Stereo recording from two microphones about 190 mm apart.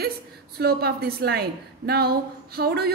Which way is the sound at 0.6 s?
55° right (ahead or behind).